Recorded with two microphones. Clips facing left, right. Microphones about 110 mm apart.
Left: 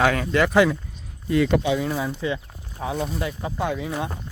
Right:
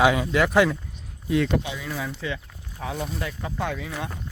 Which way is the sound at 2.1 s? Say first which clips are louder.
Left 5 dB; 20° left (ahead or behind).